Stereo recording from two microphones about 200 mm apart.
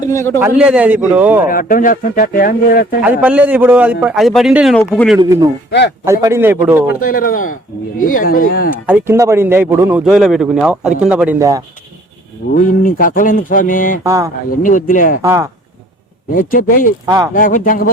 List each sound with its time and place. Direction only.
0.1 s speech: 15° left (ahead or behind)
0.3 s a man's voice: 10° right (ahead or behind)
1.5 s speech: 45° left (ahead or behind)
3.0 s a man's voice: 10° right (ahead or behind); by 5.1 s 10° left (ahead or behind)
5.2 s a man's voice: 20° right (ahead or behind)
7.0 s speech: 45° left (ahead or behind)
8.9 s a man's voice: 10° right (ahead or behind)
12.8 s speech: 45° left (ahead or behind)
14.0 s a man's voice: 15° right (ahead or behind)
14.5 s speech: 40° left (ahead or behind)
15.2 s a man's voice: 15° right (ahead or behind)
16.3 s speech: 45° left (ahead or behind)